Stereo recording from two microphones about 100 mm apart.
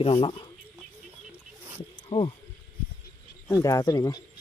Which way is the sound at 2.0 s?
65° left (ahead or behind).